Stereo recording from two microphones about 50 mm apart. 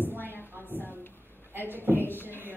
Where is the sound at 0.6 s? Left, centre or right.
Right.